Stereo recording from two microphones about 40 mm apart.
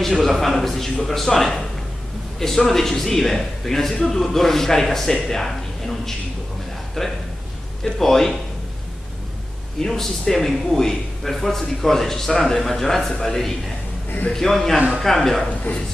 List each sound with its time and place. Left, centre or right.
0.2 s a man's voice: centre
9.8 s a man's voice: centre